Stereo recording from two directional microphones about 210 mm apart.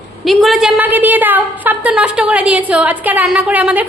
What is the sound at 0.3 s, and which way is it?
A woman's voice, centre (ahead or behind).